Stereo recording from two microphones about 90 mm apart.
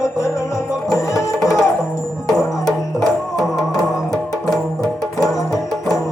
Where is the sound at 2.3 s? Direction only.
5° left (ahead or behind).